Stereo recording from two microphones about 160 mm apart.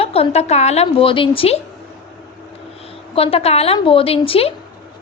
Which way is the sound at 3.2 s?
40° left (ahead or behind).